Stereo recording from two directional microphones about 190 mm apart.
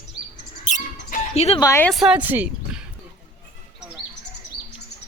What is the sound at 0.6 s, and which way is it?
Dog, 40° left (ahead or behind).